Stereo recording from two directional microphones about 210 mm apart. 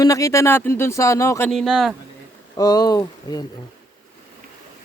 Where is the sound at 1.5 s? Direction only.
Centre (ahead or behind).